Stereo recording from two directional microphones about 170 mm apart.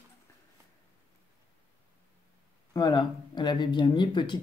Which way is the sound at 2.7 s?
25° left (ahead or behind).